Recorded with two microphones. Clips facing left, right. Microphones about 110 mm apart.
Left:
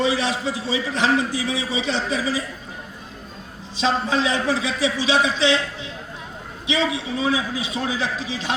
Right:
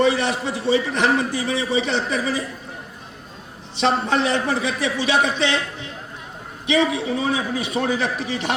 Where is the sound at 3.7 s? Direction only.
65° right (ahead or behind).